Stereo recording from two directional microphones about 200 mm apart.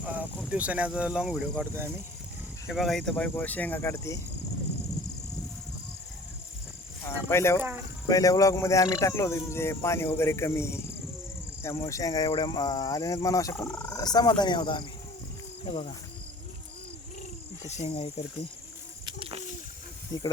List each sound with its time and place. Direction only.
0.0 s cricket: 10° right (ahead or behind)
0.3 s speech: 5° right (ahead or behind); by 4.2 s 15° left (ahead or behind)
7.0 s speech: 15° left (ahead or behind)
17.7 s speech: 30° left (ahead or behind)
19.0 s bird: 25° right (ahead or behind)